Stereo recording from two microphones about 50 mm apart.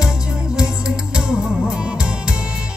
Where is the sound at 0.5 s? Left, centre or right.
Centre.